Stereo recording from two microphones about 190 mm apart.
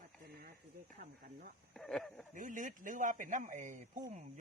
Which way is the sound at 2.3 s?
45° right (ahead or behind).